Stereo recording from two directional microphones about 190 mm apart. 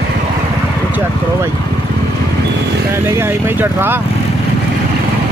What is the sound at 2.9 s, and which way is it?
Speech, 10° right (ahead or behind).